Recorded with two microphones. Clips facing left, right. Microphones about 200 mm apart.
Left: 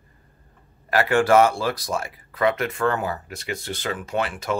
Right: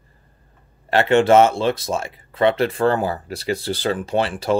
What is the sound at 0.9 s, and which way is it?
Speech, 25° right (ahead or behind).